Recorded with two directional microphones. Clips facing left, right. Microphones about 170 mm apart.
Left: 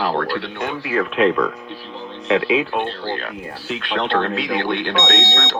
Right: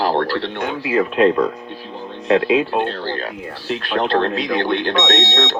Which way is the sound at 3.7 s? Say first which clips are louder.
Right 2 dB; 40° right (ahead or behind).